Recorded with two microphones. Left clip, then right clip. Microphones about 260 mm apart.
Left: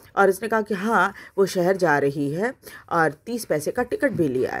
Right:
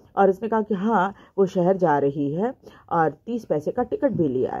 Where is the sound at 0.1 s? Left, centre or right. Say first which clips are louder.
Even; left.